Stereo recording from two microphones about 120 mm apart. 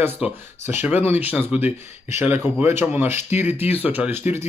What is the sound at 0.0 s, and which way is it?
Speech, 15° right (ahead or behind).